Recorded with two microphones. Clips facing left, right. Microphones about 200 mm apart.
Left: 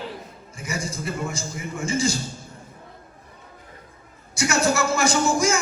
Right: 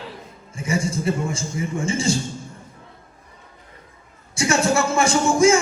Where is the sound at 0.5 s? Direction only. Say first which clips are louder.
Right 7 dB; 30° right (ahead or behind).